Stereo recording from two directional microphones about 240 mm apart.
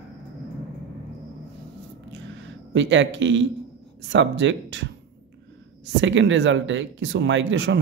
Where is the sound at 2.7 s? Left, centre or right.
Right.